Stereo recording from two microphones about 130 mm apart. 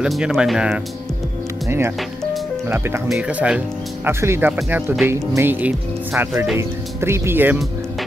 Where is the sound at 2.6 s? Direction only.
20° right (ahead or behind).